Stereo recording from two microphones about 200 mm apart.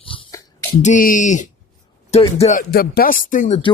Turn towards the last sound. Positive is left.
turn(degrees=40)  # may be behind; listen again after turning